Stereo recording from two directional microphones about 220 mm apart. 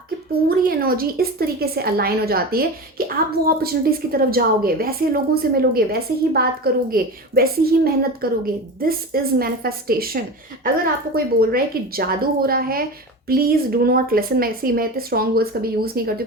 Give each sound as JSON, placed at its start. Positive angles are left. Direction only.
{"t": 0.4, "sound": "a woman's voice", "side_deg": -40}